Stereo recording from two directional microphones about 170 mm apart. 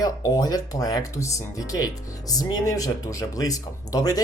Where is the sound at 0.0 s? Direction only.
20° left (ahead or behind).